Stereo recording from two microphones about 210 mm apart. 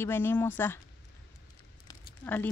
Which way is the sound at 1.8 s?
10° left (ahead or behind).